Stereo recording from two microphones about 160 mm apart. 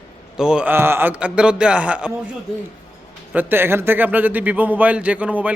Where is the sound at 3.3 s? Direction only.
10° right (ahead or behind).